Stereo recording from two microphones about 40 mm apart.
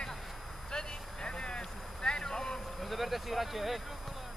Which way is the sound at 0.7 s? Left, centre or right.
Centre.